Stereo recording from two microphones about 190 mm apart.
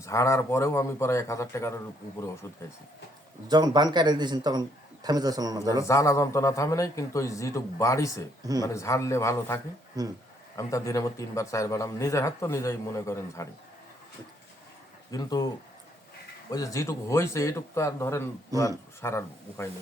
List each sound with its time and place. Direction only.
0.0 s a man's voice: 15° left (ahead or behind)
3.5 s a man's voice: 20° right (ahead or behind)
5.8 s a man's voice: 15° left (ahead or behind)
10.0 s a man's voice: 20° right (ahead or behind)
10.6 s a man's voice: 15° left (ahead or behind)
15.1 s speech: 20° left (ahead or behind)
16.5 s a man's voice: 20° left (ahead or behind)